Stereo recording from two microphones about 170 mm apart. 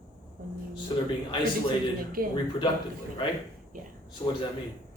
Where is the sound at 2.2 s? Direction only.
60° right (ahead or behind).